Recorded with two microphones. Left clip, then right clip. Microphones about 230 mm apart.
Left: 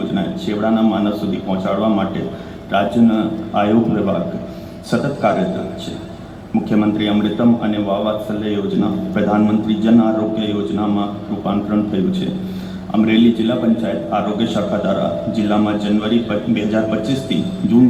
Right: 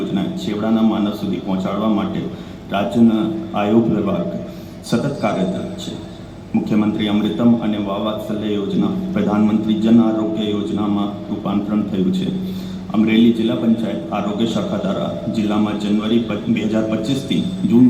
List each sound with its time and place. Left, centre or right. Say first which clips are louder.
0.1 s a man's voice: left 2 dB; right
5.2 s a man's voice: left 6 dB; right
6.7 s a man's voice: left 3 dB; right
12.9 s a man's voice: left 1 dB; right